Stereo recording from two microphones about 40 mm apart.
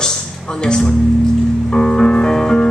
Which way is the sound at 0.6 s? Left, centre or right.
Centre.